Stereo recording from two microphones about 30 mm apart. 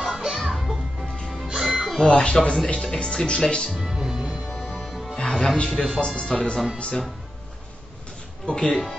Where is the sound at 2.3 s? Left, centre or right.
Left.